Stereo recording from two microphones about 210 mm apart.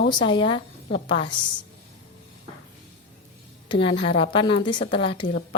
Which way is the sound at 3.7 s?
25° left (ahead or behind).